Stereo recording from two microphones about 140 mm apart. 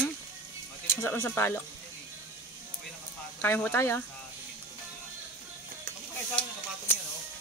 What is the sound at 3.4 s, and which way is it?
Speech, 15° left (ahead or behind).